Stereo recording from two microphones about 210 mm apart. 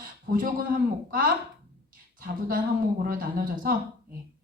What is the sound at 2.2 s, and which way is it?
A woman's voice, 45° right (ahead or behind).